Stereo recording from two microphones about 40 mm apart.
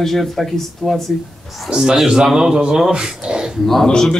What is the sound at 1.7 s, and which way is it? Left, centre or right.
Speech, centre.